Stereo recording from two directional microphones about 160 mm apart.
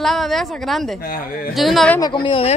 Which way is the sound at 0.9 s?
65° left (ahead or behind).